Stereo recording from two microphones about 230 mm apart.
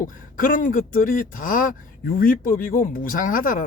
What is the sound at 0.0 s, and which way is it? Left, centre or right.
Speech, left.